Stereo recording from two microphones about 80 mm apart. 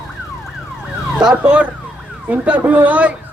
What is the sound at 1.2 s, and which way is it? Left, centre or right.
A man's voice, centre.